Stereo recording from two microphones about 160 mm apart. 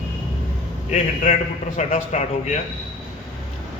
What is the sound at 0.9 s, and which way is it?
A man's voice, 45° left (ahead or behind).